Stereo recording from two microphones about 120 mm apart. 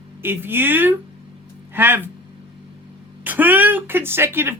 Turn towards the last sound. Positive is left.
turn(degrees=-20)  # may be behind; listen again after turning